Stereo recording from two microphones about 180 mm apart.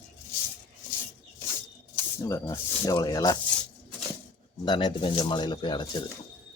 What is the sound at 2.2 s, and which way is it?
Speech, 15° left (ahead or behind).